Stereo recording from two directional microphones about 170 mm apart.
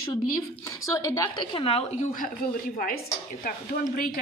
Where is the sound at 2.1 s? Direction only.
55° left (ahead or behind).